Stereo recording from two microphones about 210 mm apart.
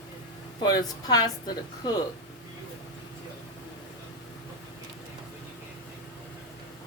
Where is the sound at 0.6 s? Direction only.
20° left (ahead or behind).